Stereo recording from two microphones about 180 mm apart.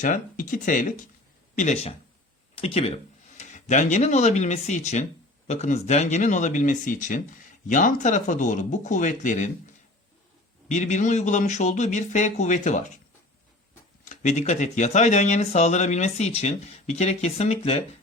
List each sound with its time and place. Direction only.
0.0 s speech: 45° left (ahead or behind)
10.7 s speech: 40° left (ahead or behind)
14.0 s speech: 45° left (ahead or behind)